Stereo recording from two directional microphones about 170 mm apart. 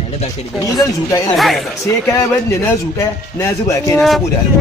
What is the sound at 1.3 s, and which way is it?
Speech, centre (ahead or behind).